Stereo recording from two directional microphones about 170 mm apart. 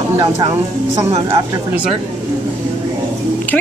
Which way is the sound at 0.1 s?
20° right (ahead or behind).